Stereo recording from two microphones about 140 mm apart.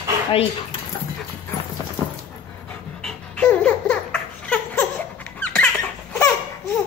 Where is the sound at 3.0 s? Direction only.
5° left (ahead or behind).